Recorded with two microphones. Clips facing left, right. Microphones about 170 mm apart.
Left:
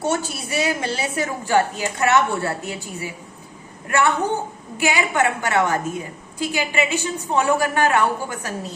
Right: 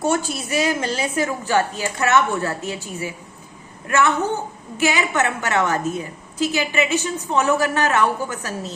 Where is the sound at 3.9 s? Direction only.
15° left (ahead or behind).